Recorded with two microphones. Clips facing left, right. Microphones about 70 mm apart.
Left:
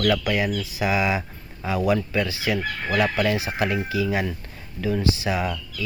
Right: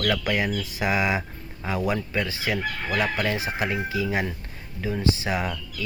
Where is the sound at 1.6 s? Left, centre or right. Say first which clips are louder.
Left 4 dB; right.